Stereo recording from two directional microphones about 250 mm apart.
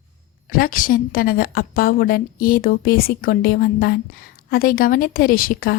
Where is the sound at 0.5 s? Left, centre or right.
Left.